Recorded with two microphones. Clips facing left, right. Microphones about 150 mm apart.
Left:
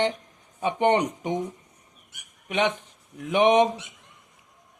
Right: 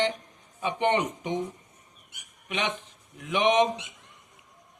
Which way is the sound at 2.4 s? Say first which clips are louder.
Left 6 dB; 45° left (ahead or behind).